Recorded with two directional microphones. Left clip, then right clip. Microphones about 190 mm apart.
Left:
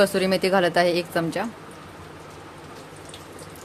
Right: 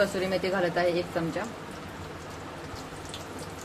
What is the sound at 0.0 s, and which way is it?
Speech, 65° left (ahead or behind).